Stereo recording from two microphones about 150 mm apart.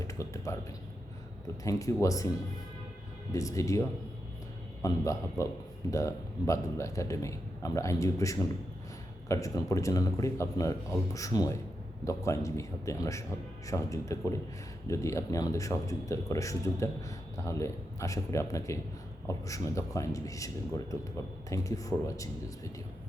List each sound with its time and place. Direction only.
0.0 s speech: 20° left (ahead or behind)
1.6 s a man's voice: 20° left (ahead or behind)
3.3 s a man's voice: 20° left (ahead or behind)